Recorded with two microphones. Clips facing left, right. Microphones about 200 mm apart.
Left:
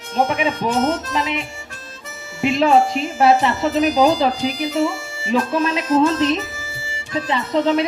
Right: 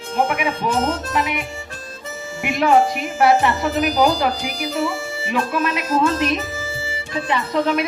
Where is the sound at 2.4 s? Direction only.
25° left (ahead or behind).